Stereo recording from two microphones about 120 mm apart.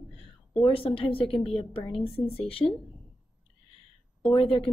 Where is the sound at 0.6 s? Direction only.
50° left (ahead or behind).